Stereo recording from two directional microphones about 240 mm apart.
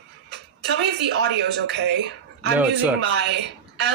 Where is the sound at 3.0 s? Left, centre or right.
Right.